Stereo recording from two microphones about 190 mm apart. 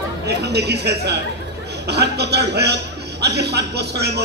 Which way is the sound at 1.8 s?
60° right (ahead or behind).